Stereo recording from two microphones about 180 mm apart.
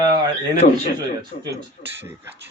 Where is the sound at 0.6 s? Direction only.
40° left (ahead or behind).